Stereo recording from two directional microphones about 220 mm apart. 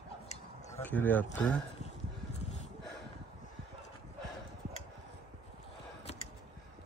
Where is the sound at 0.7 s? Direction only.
10° left (ahead or behind).